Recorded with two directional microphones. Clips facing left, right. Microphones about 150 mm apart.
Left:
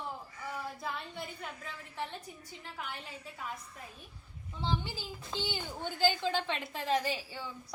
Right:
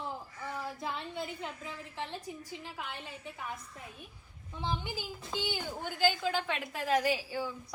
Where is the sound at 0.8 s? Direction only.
20° right (ahead or behind).